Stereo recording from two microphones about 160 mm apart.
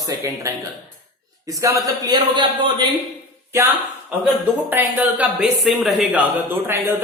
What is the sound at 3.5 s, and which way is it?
Speech, 15° right (ahead or behind).